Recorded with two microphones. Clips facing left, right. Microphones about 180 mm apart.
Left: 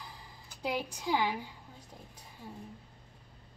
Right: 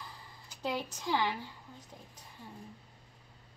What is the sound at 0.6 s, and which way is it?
Speech, 10° left (ahead or behind).